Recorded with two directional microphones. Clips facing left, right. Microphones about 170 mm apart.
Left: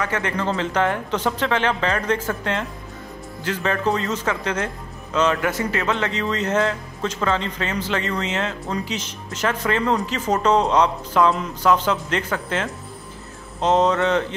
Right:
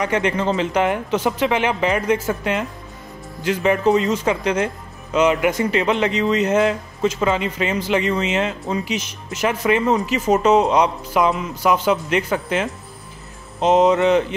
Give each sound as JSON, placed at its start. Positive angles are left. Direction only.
{"t": 0.0, "sound": "speech", "side_deg": -20}